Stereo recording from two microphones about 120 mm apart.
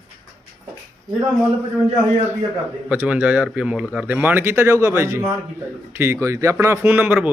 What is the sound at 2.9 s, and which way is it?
Speech, 10° right (ahead or behind).